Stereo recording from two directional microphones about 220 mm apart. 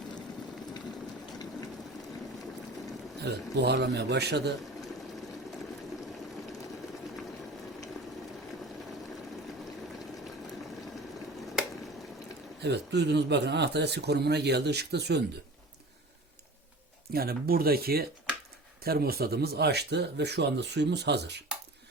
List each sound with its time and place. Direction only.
3.2 s a man's voice: 50° right (ahead or behind)
12.5 s a man's voice: 50° right (ahead or behind)
17.1 s a man's voice: 45° right (ahead or behind)